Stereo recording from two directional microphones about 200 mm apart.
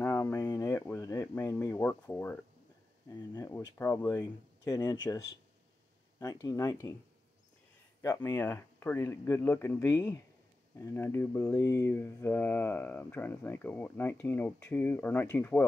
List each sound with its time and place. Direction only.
0.0 s a sound: 10° left (ahead or behind)
3.1 s speech: 15° left (ahead or behind)
8.0 s speech: 15° left (ahead or behind)